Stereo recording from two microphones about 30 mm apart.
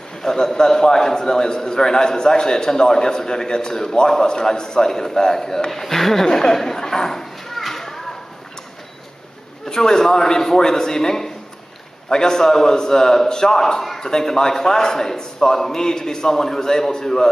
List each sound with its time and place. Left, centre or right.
0.2 s a man's voice: centre
6.2 s a sound: left
9.7 s a man's voice: centre